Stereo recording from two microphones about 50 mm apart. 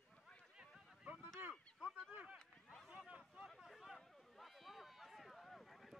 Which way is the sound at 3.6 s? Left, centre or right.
Centre.